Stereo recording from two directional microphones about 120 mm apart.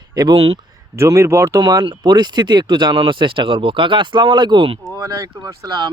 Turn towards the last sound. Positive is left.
turn(degrees=-35)  # may be behind; listen again after turning